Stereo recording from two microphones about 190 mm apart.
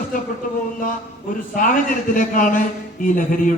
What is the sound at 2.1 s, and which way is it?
A man's voice, 45° left (ahead or behind).